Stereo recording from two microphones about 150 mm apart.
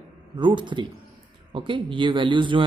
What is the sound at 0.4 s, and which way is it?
Speech, 30° right (ahead or behind).